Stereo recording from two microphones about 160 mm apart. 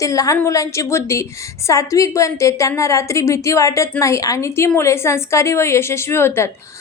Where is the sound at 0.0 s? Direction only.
20° left (ahead or behind).